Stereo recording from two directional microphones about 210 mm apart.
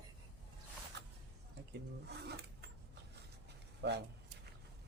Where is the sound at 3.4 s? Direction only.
55° right (ahead or behind).